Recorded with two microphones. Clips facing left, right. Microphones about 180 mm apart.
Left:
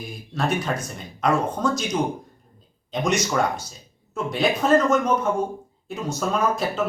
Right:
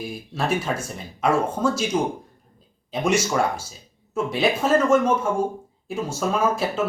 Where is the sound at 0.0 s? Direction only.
5° right (ahead or behind).